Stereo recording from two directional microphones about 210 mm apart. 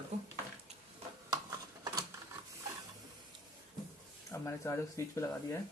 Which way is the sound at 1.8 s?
20° right (ahead or behind).